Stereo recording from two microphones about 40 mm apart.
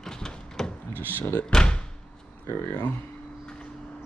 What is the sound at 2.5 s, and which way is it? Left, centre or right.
Speech, left.